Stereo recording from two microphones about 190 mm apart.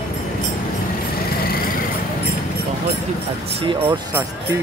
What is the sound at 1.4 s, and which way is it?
Vehicle, 50° left (ahead or behind).